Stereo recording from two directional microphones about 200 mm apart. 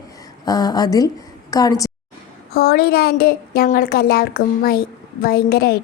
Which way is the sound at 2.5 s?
50° left (ahead or behind).